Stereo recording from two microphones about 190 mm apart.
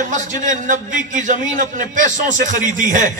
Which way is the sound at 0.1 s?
40° right (ahead or behind).